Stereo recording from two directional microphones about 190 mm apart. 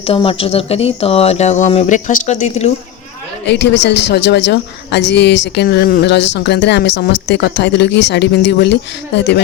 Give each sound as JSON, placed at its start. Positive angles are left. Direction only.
{"t": 0.0, "sound": "speech", "side_deg": 30}
{"t": 3.6, "sound": "a man's voice", "side_deg": 65}